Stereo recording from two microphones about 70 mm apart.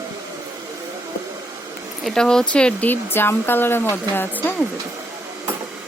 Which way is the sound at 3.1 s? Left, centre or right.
Left.